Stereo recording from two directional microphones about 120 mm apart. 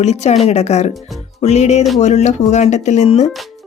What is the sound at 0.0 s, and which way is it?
Speech, 70° left (ahead or behind).